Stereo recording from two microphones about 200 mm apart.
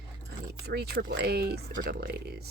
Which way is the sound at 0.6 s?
55° right (ahead or behind).